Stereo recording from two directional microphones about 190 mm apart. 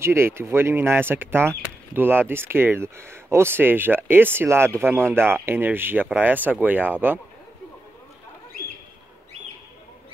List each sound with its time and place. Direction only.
0.0 s speech: 15° right (ahead or behind)